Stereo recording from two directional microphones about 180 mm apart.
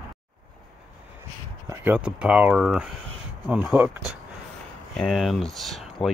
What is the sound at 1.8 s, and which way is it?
Speech, 10° right (ahead or behind).